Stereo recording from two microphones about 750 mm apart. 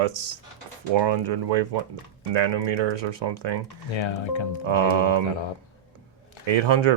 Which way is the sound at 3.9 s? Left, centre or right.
Left.